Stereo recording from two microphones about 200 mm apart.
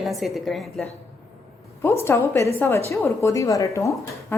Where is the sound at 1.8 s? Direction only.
10° left (ahead or behind).